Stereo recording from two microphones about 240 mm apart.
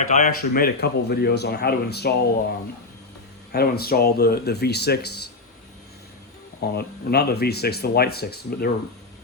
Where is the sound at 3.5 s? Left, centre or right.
Left.